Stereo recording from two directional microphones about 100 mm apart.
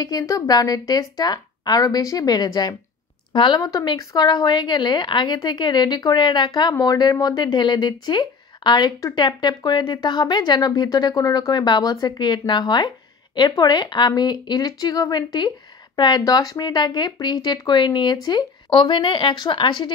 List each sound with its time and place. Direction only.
0.0 s a woman's voice: 40° left (ahead or behind)
6.7 s a woman's voice: 35° left (ahead or behind)
18.7 s a woman's voice: 55° left (ahead or behind)